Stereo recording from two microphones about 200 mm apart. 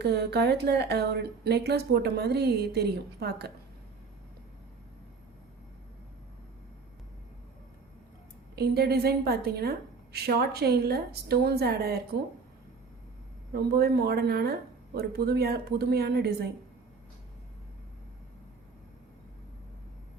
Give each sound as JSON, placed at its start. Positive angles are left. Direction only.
{"t": 0.0, "sound": "speech", "side_deg": -55}
{"t": 8.5, "sound": "a woman's voice", "side_deg": -50}
{"t": 13.5, "sound": "a woman's voice", "side_deg": -50}